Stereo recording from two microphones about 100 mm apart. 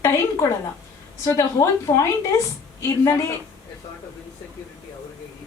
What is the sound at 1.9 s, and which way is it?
Speech, 40° left (ahead or behind).